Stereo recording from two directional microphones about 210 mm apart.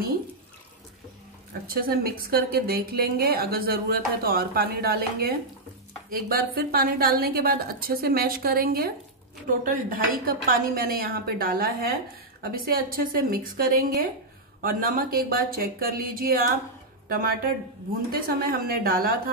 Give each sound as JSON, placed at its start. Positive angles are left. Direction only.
{"t": 1.7, "sound": "a woman's voice", "side_deg": -45}